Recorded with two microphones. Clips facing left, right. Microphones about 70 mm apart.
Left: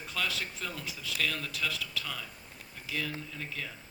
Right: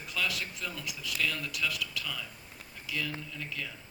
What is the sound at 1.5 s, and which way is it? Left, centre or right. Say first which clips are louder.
A man's voice: right 1 dB; left.